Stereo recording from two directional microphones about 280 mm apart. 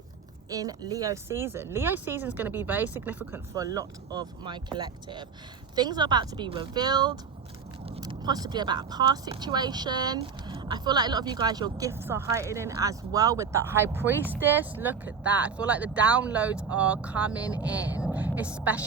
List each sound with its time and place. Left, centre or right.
0.5 s speech: centre